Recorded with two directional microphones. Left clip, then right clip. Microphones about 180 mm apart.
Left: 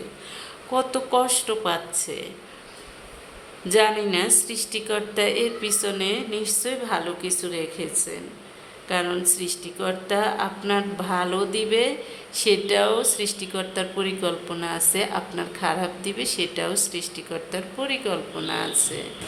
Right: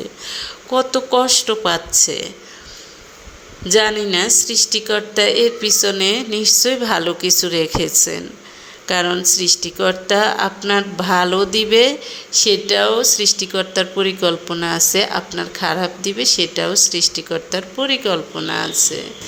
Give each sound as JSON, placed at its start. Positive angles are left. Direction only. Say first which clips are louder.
{"t": 0.3, "sound": "speech", "louder": "right 8 dB", "side_deg": -25}
{"t": 3.7, "sound": "speech", "louder": "right 5 dB", "side_deg": -20}